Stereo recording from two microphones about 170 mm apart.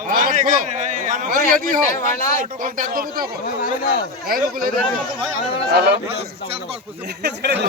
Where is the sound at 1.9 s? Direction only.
50° left (ahead or behind).